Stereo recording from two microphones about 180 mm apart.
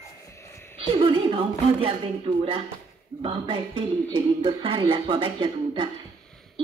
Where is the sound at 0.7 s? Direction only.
30° right (ahead or behind).